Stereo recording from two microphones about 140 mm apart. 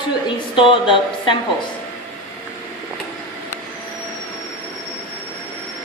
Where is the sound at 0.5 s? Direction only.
40° left (ahead or behind).